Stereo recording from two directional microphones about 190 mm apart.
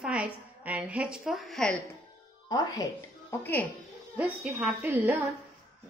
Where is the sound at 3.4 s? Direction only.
10° left (ahead or behind).